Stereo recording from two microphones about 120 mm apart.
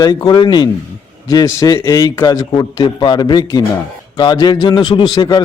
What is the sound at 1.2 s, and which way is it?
A man's voice, 30° left (ahead or behind).